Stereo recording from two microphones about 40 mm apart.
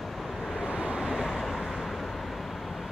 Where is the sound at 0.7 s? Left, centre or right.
Right.